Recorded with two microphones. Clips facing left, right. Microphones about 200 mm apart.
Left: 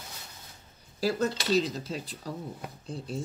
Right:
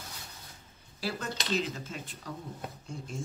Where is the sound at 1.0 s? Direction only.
40° left (ahead or behind).